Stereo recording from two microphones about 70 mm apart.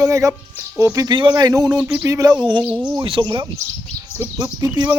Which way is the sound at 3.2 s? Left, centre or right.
Right.